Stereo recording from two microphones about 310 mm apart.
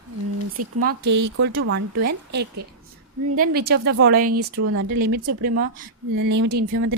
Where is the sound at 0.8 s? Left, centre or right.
Right.